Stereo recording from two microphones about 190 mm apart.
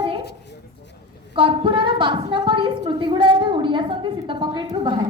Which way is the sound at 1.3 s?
25° right (ahead or behind).